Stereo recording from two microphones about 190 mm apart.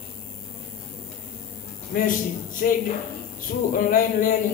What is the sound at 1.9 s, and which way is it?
A man's voice, 50° left (ahead or behind).